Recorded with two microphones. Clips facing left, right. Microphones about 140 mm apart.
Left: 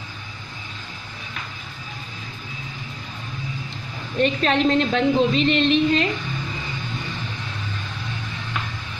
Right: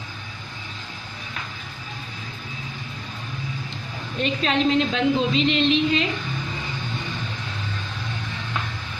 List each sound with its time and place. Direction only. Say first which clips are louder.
4.2 s a woman's voice: left 3 dB; 45° left (ahead or behind)